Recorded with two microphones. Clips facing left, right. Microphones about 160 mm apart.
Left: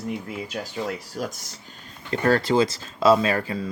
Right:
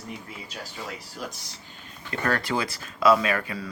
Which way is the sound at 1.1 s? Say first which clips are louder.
Left 6 dB; 45° left (ahead or behind).